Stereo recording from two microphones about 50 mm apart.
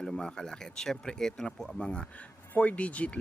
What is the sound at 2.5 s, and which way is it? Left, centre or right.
Speech, left.